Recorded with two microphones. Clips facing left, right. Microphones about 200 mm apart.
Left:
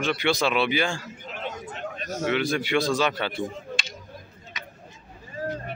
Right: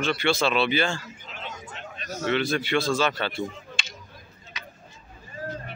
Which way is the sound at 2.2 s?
10° left (ahead or behind).